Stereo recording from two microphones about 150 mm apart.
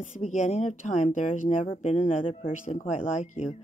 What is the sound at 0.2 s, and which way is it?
Speech, 55° left (ahead or behind).